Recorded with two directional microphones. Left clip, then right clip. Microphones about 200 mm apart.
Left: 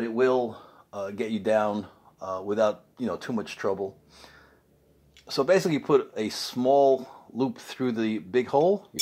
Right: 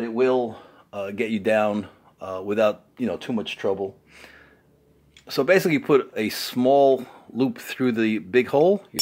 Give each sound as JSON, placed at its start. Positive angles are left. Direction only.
{"t": 0.0, "sound": "speech", "side_deg": -10}